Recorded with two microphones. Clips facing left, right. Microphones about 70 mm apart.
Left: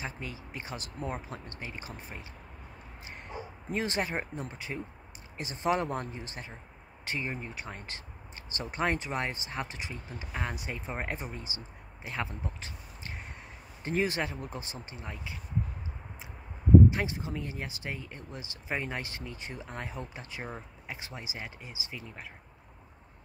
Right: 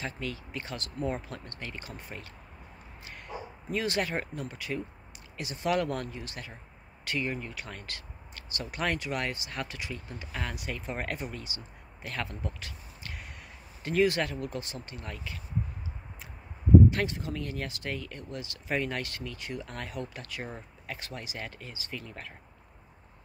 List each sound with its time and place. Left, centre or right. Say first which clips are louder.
0.0 s speech: right 3 dB; centre
3.7 s speech: right 1 dB; left
16.9 s speech: right 2 dB; centre